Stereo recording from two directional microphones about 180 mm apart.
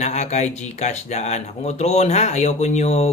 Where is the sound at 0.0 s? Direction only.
40° left (ahead or behind).